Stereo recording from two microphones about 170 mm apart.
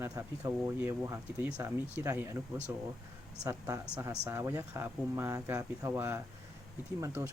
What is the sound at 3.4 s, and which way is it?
Speech, 20° right (ahead or behind).